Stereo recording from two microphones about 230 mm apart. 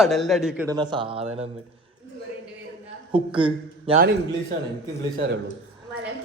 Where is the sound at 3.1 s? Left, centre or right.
Right.